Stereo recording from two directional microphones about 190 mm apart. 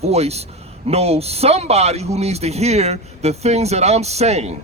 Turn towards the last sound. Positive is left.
turn(degrees=-35)  # may be behind; listen again after turning